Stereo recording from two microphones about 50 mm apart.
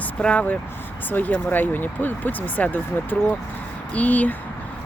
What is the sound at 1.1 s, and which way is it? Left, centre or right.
Speech, left.